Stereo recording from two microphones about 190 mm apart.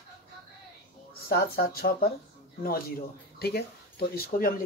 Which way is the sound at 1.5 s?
55° left (ahead or behind).